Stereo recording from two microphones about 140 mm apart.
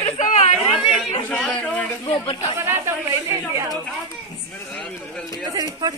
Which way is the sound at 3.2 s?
25° right (ahead or behind).